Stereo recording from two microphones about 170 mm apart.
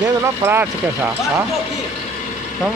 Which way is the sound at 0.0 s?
15° right (ahead or behind).